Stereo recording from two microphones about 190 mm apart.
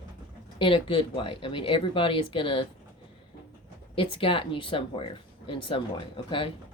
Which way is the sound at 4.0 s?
25° left (ahead or behind).